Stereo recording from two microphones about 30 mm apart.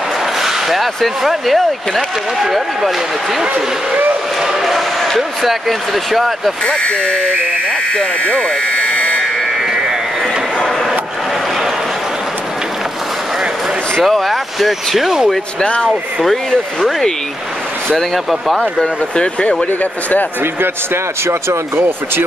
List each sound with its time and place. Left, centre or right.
0.4 s speech: centre
4.4 s a sound: centre
5.4 s speech: centre
6.9 s speech: left
7.9 s buzzer: left
14.0 s speech: centre
16.3 s speech: centre
17.9 s speech: centre
19.1 s speech: left
19.6 s speech: left